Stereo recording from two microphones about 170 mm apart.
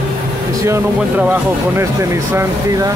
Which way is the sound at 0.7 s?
10° right (ahead or behind).